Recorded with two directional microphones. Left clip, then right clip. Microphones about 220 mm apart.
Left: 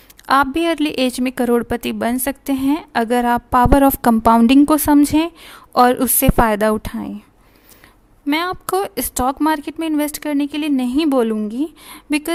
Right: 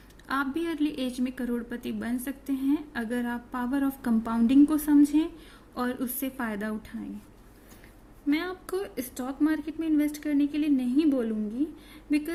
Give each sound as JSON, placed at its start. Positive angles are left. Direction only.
{"t": 0.3, "sound": "a woman's voice", "side_deg": 45}
{"t": 8.3, "sound": "a woman's voice", "side_deg": 45}